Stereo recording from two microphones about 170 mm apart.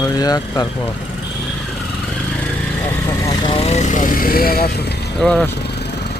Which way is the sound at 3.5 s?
35° left (ahead or behind).